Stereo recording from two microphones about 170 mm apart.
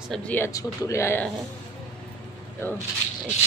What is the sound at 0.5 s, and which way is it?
Speech, 20° left (ahead or behind).